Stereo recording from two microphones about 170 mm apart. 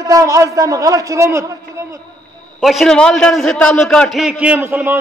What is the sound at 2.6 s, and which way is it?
A man's voice, centre (ahead or behind).